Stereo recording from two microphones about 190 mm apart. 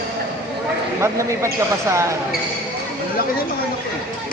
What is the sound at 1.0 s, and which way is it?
Speech, 15° right (ahead or behind).